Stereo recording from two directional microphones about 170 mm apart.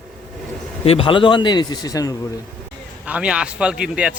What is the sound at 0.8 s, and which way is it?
A man's voice, 30° left (ahead or behind).